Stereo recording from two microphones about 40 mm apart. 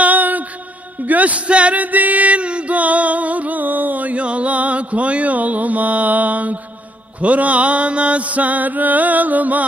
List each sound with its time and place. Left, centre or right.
0.0 s mantra: right
1.0 s speech: right
1.8 s music: right
7.2 s mantra: right